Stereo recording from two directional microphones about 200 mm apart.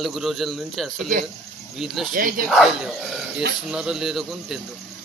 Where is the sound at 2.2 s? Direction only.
45° right (ahead or behind).